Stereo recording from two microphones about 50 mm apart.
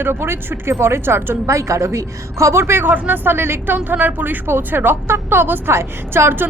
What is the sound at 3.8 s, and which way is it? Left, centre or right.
Speech, right.